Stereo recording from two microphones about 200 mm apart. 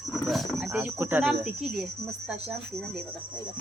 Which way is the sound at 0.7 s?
15° right (ahead or behind).